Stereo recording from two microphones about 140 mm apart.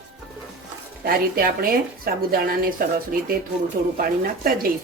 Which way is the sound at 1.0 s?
90° right.